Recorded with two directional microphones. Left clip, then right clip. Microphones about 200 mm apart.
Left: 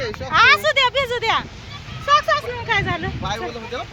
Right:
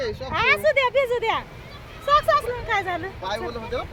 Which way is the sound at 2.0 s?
25° left (ahead or behind).